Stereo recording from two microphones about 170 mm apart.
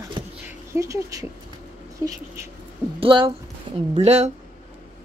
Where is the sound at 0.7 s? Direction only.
20° right (ahead or behind).